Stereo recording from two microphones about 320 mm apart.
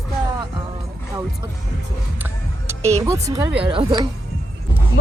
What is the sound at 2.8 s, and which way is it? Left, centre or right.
Speech, centre.